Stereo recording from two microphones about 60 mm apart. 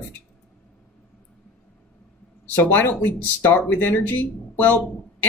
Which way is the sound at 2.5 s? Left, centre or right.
Left.